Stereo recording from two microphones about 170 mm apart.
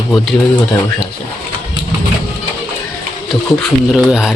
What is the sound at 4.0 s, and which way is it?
Speech, centre (ahead or behind).